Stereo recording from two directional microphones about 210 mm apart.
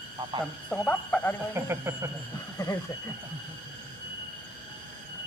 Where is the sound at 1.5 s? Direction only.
10° right (ahead or behind).